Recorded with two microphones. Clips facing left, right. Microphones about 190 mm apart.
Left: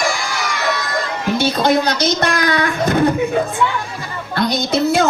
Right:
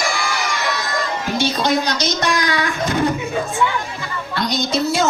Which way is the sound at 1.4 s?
55° left (ahead or behind).